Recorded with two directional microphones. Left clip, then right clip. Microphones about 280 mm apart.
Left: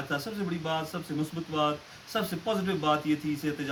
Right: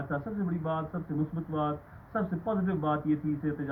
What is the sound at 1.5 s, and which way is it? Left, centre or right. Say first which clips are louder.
Speech: left 5 dB; left.